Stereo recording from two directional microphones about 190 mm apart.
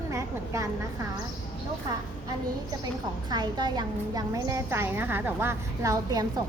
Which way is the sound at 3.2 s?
20° right (ahead or behind).